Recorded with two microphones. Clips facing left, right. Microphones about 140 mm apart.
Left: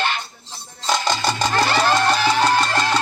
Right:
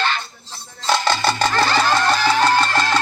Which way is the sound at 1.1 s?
5° right (ahead or behind).